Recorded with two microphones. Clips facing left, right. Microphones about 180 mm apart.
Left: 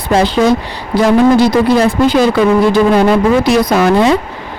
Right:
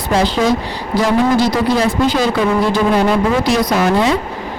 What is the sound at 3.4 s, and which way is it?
Speech, 60° left (ahead or behind).